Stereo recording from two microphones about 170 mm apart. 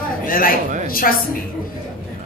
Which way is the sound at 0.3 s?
55° left (ahead or behind).